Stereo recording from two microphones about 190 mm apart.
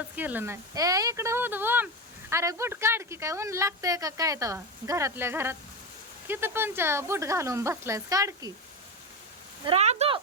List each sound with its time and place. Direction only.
0.2 s speech: 10° right (ahead or behind)
9.6 s speech: 35° right (ahead or behind)